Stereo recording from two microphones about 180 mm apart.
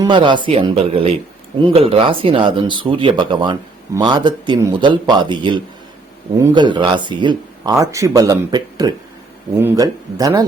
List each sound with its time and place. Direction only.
0.0 s speech: 25° right (ahead or behind)